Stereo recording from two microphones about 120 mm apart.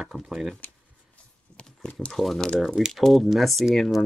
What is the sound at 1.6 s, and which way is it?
Speech, 10° left (ahead or behind).